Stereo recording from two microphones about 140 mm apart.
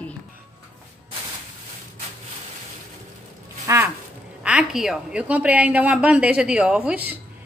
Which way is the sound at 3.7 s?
20° right (ahead or behind).